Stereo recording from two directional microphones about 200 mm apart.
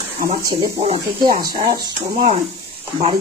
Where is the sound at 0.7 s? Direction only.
30° right (ahead or behind).